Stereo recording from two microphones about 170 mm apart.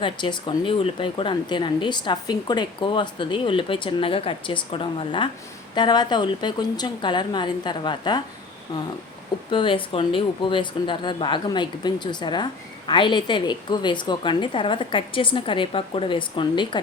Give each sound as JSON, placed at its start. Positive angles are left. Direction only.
{"t": 0.0, "sound": "speech", "side_deg": 25}
{"t": 9.5, "sound": "speech", "side_deg": 30}